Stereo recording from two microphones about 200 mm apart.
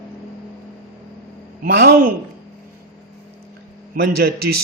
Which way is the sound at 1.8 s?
50° right (ahead or behind).